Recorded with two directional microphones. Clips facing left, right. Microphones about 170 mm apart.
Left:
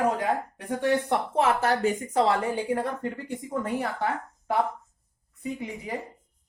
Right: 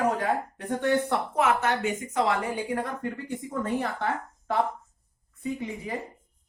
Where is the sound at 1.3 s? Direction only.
30° left (ahead or behind).